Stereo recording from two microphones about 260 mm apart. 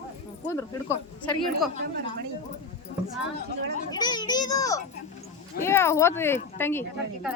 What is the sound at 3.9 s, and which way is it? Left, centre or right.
Speech, centre.